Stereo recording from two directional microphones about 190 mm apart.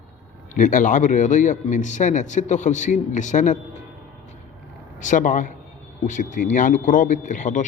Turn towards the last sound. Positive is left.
turn(degrees=40)  # may be behind; listen again after turning